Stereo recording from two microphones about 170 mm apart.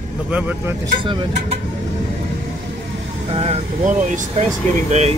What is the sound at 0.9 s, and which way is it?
Speech, 30° right (ahead or behind).